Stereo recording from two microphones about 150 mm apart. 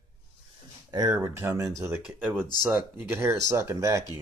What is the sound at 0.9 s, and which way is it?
Speech, 25° right (ahead or behind).